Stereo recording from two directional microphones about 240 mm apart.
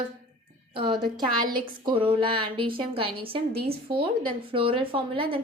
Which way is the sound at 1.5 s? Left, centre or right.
Right.